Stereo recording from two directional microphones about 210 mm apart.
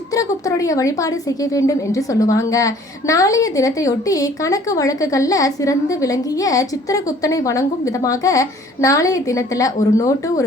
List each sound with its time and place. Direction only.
0.1 s a woman's voice: 15° left (ahead or behind)